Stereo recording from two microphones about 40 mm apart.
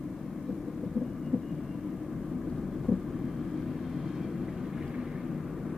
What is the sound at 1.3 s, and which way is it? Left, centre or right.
Heart sounds, left.